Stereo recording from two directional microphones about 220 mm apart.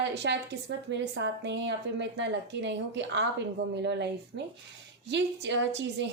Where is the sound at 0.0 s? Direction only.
50° right (ahead or behind).